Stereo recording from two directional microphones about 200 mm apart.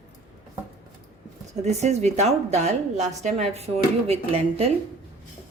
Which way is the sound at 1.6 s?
35° right (ahead or behind).